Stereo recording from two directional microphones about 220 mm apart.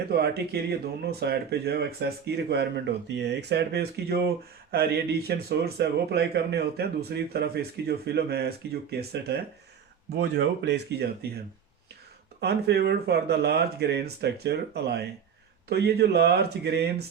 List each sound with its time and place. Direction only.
0.0 s speech: 45° right (ahead or behind)
12.4 s speech: 50° right (ahead or behind)